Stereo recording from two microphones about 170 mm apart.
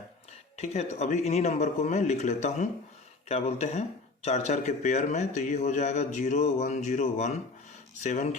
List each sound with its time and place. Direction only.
0.5 s speech: 40° left (ahead or behind)